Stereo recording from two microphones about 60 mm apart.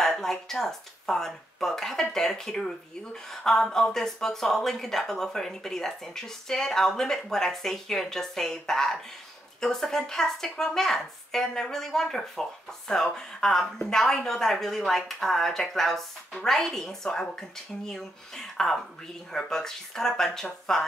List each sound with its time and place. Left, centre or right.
0.0 s a woman's voice: centre